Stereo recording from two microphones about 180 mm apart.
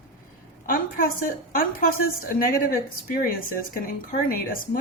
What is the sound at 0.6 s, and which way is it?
A woman's voice, 55° left (ahead or behind).